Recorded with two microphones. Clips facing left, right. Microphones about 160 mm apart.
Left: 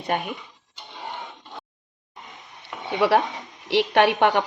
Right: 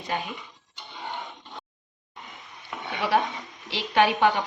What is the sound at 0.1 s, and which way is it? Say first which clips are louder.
Speech: left 4 dB; 60° left (ahead or behind).